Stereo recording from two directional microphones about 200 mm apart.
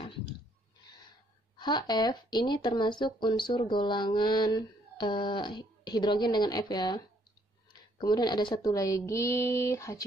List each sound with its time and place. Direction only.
1.6 s speech: 20° left (ahead or behind)
8.0 s speech: 20° left (ahead or behind)